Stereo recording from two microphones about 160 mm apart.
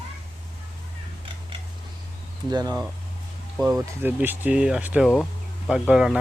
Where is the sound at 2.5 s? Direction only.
25° right (ahead or behind).